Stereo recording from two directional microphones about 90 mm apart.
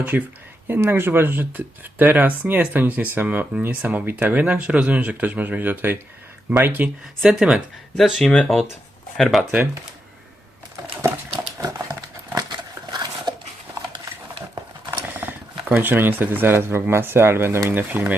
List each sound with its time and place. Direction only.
0.1 s speech: 20° right (ahead or behind)
7.2 s speech: 5° right (ahead or behind)
8.2 s speech: 10° left (ahead or behind)
8.4 s speech: centre (ahead or behind)
9.4 s speech: 15° right (ahead or behind)
11.5 s a sound: 40° right (ahead or behind)
14.8 s speech: 20° right (ahead or behind)